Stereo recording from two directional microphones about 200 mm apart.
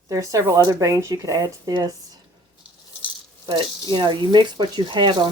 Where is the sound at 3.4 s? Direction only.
25° right (ahead or behind).